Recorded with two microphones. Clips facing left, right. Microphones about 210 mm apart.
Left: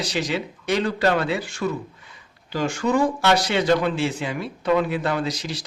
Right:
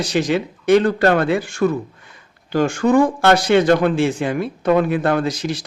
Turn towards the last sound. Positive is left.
turn(degrees=-50)  # may be behind; listen again after turning